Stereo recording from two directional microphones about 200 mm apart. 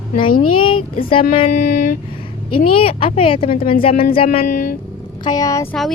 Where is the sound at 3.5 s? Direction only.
45° left (ahead or behind).